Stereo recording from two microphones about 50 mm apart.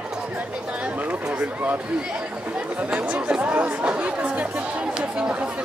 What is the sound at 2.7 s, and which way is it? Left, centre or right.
Speech, right.